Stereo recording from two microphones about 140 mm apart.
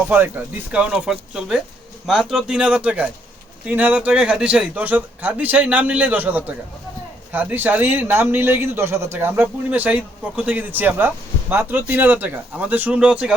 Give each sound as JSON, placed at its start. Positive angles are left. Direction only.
{"t": 0.1, "sound": "speech", "side_deg": -10}